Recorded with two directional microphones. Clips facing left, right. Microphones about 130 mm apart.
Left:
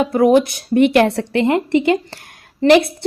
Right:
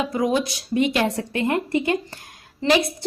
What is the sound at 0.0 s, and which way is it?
Speech, 60° left (ahead or behind).